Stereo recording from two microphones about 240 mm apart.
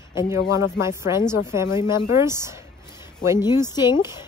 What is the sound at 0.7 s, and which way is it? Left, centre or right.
Speech, centre.